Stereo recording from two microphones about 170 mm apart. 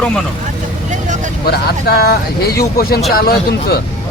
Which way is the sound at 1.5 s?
65° left (ahead or behind).